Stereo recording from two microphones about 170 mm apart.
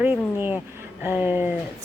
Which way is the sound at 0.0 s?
10° right (ahead or behind).